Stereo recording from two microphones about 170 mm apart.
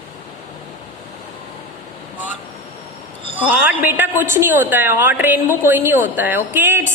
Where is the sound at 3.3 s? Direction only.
10° right (ahead or behind).